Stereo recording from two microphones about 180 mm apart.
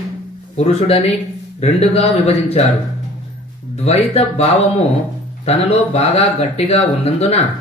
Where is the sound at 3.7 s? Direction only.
35° left (ahead or behind).